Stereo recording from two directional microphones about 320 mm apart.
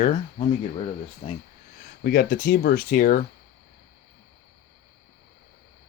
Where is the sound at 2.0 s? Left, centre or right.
Left.